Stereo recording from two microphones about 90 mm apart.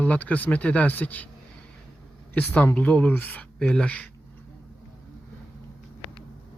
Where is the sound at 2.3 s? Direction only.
15° left (ahead or behind).